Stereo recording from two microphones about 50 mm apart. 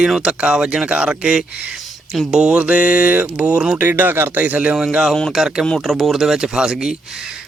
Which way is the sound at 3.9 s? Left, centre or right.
Right.